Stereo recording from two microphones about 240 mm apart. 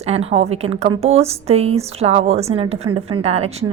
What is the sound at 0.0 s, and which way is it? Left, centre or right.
A woman's voice, right.